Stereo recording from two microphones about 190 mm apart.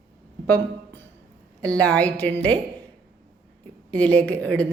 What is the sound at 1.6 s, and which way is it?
Speech, 5° left (ahead or behind).